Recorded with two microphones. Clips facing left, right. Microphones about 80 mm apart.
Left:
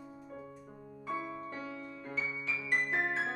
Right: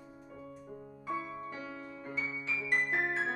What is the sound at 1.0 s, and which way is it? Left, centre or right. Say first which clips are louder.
Music: even; centre.